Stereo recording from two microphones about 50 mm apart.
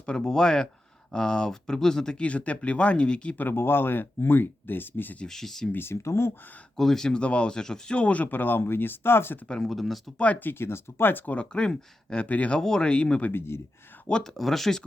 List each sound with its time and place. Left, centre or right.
0.0 s speech: centre
2.2 s speech: left
3.3 s speech: left
5.2 s speech: centre
5.7 s speech: left
6.7 s speech: centre
7.2 s speech: left
7.9 s speech: left
9.6 s speech: centre
10.4 s speech: left
11.3 s speech: centre
12.5 s speech: centre
13.3 s speech: left
14.3 s speech: centre